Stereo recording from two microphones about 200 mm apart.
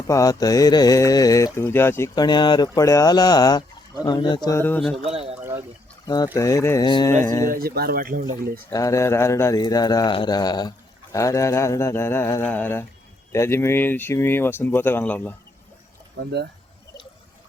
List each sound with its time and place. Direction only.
0.1 s speech: 15° left (ahead or behind)
4.9 s a sound: 30° right (ahead or behind)
5.4 s pour: 10° right (ahead or behind)
6.1 s speech: 20° left (ahead or behind)
7.5 s speech: 50° right (ahead or behind)
8.7 s speech: 15° left (ahead or behind)